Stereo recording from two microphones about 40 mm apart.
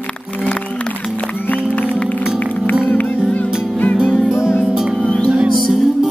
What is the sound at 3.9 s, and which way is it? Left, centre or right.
Music, centre.